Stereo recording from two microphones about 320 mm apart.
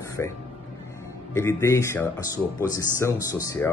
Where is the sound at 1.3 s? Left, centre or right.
Centre.